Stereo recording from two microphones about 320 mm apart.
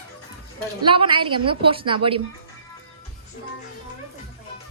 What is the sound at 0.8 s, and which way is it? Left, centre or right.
A woman's voice, centre.